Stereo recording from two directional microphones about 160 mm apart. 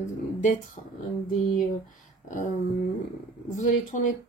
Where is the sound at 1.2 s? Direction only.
60° left (ahead or behind).